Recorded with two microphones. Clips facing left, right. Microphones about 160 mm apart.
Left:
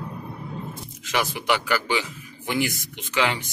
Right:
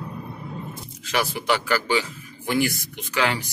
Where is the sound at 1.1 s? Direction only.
15° left (ahead or behind).